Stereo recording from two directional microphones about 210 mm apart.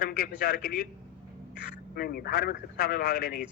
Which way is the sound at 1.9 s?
45° left (ahead or behind).